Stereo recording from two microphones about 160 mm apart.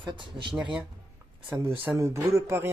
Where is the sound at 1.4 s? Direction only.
10° right (ahead or behind).